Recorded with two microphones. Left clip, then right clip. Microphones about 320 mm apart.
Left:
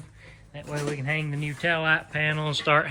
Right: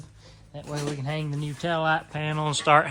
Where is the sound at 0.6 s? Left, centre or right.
Centre.